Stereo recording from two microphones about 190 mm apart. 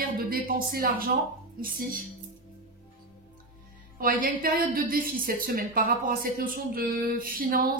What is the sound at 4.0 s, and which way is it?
Speech, 45° right (ahead or behind).